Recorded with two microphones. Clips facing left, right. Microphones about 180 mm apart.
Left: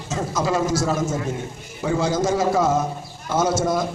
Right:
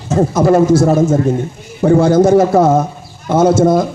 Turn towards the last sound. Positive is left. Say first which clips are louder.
# right 10 dB
turn(degrees=-60)  # may be behind; listen again after turning